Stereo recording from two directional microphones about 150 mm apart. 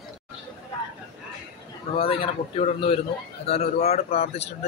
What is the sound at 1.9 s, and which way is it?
A man's voice, 40° left (ahead or behind).